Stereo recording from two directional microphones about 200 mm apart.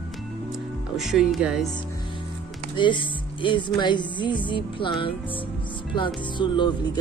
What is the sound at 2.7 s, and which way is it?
Speech, 25° left (ahead or behind).